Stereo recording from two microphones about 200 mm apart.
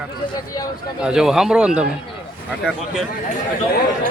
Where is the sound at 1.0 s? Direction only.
5° right (ahead or behind).